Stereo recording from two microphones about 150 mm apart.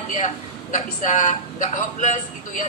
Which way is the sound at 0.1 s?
55° left (ahead or behind).